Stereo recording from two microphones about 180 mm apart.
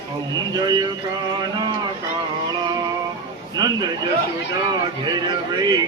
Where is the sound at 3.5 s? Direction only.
20° right (ahead or behind).